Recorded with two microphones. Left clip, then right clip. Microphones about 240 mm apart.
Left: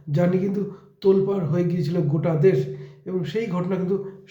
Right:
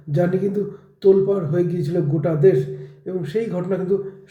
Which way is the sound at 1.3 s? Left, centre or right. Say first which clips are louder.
Right 4 dB; centre.